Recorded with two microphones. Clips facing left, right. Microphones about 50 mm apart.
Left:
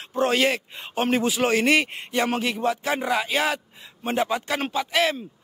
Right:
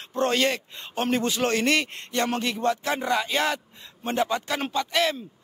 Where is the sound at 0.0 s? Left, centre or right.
Centre.